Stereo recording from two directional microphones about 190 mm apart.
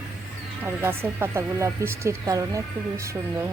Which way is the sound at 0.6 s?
10° right (ahead or behind).